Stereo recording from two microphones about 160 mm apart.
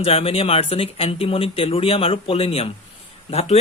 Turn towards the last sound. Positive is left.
turn(degrees=40)  # may be behind; listen again after turning